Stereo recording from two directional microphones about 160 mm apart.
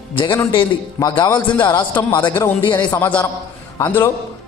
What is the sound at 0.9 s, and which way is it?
Speech, 25° left (ahead or behind).